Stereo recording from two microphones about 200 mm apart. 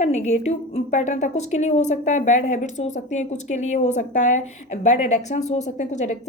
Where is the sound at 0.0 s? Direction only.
35° left (ahead or behind).